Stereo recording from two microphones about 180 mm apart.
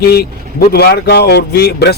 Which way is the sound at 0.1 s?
60° left (ahead or behind).